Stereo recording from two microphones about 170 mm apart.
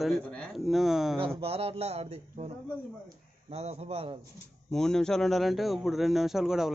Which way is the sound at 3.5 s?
40° right (ahead or behind).